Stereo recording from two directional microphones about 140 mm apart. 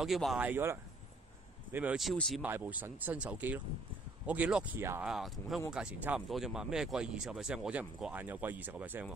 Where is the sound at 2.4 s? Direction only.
10° right (ahead or behind).